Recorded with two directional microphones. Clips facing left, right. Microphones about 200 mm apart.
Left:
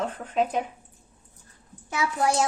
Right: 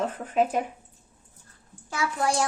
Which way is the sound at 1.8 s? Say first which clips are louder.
Left 2 dB; 20° left (ahead or behind).